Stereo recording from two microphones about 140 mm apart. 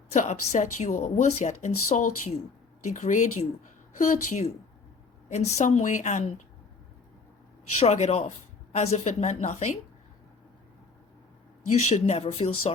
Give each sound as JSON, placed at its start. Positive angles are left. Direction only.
{"t": 0.1, "sound": "speech", "side_deg": 55}
{"t": 7.8, "sound": "speech", "side_deg": 55}
{"t": 11.7, "sound": "speech", "side_deg": 55}